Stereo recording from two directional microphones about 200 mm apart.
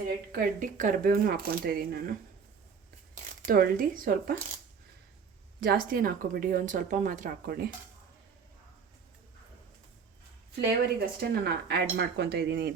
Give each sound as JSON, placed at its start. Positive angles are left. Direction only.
{"t": 0.3, "sound": "speech", "side_deg": -45}
{"t": 3.4, "sound": "speech", "side_deg": -45}
{"t": 5.5, "sound": "speech", "side_deg": -45}
{"t": 10.5, "sound": "speech", "side_deg": -50}